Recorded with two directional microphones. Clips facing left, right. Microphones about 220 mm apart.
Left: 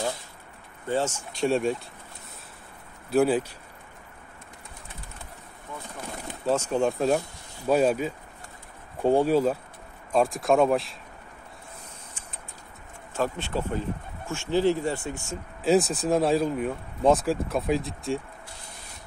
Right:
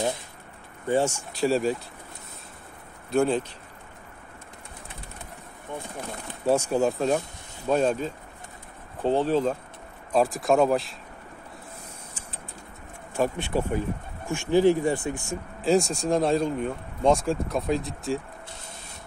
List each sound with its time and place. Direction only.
0.8 s speech: 15° right (ahead or behind)
3.1 s speech: 5° left (ahead or behind)
6.4 s speech: 10° right (ahead or behind); by 9.6 s 10° left (ahead or behind)
10.1 s speech: centre (ahead or behind)
13.1 s speech: 15° right (ahead or behind)
15.6 s speech: centre (ahead or behind)